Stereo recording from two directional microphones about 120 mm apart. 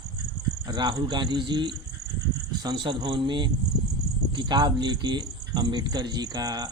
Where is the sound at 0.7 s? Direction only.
35° right (ahead or behind).